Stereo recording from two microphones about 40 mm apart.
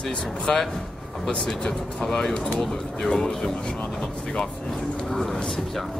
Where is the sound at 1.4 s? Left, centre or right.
Centre.